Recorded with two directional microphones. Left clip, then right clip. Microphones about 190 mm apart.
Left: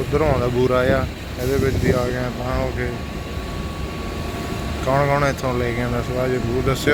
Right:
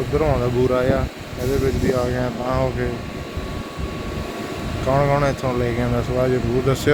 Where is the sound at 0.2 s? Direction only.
Centre (ahead or behind).